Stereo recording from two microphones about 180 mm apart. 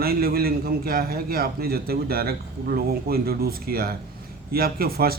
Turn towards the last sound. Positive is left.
turn(degrees=-55)  # may be behind; listen again after turning